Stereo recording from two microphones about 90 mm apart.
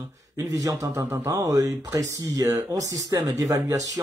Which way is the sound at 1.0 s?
25° right (ahead or behind).